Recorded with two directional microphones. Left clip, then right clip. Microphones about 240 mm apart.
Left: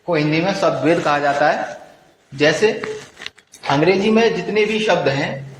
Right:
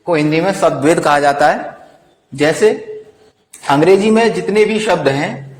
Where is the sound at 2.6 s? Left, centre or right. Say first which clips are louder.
Right 5 dB; right.